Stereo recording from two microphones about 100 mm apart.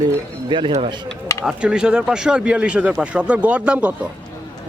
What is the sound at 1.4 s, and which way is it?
Speech, 5° right (ahead or behind).